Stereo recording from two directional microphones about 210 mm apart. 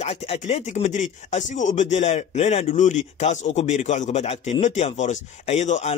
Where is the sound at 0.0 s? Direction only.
30° left (ahead or behind).